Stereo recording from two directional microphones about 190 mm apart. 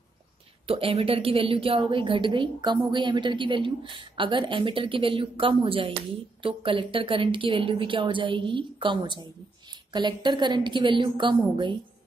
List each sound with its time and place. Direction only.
0.7 s a woman's voice: 30° right (ahead or behind)